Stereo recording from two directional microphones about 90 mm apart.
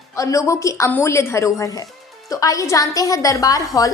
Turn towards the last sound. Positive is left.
turn(degrees=40)  # may be behind; listen again after turning